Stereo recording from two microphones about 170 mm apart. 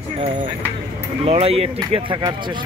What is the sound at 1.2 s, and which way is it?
Speech, 35° right (ahead or behind).